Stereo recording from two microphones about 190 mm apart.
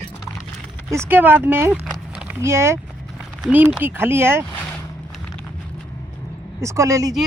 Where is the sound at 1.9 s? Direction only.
5° right (ahead or behind).